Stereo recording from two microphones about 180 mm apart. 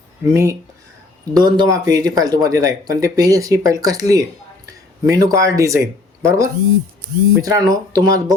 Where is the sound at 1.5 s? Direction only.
20° right (ahead or behind).